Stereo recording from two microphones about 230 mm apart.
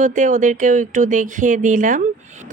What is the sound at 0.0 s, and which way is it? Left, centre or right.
Speech, right.